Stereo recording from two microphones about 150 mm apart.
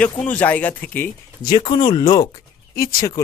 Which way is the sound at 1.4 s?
30° left (ahead or behind).